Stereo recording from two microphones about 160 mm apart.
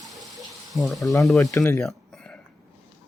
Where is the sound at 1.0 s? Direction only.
20° left (ahead or behind).